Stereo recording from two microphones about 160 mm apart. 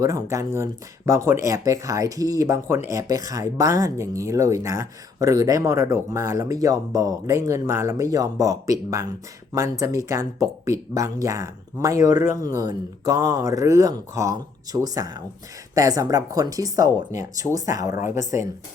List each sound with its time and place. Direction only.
0.0 s speech: 20° right (ahead or behind)